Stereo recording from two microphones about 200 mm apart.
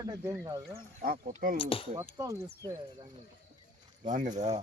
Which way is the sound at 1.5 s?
25° left (ahead or behind).